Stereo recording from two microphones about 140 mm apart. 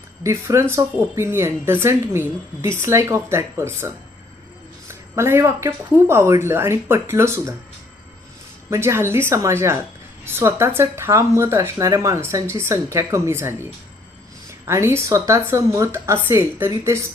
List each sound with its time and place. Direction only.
0.2 s speech: 20° right (ahead or behind)
8.7 s speech: 20° right (ahead or behind)